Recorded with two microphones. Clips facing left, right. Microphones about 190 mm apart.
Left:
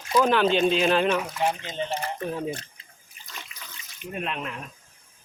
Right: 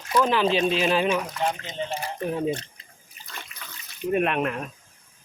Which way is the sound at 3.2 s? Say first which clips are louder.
Right 2 dB; 40° right (ahead or behind).